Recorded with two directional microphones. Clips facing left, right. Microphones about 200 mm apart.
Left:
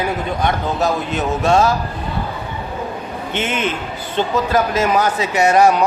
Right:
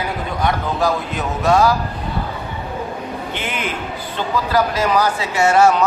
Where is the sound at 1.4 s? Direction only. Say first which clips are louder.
Right 1 dB; 25° left (ahead or behind).